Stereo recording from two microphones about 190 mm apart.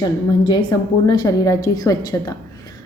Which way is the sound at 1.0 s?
20° left (ahead or behind).